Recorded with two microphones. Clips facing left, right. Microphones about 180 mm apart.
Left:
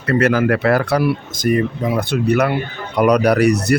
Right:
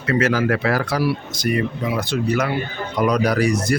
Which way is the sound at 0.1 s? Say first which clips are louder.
Left 3 dB; 60° left (ahead or behind).